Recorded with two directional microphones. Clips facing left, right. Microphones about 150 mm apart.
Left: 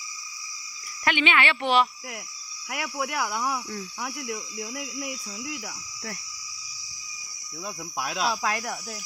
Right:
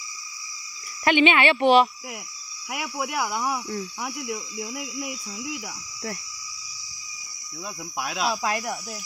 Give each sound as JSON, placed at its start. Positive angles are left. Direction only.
{"t": 1.0, "sound": "speech", "side_deg": -20}
{"t": 8.0, "sound": "speech", "side_deg": -10}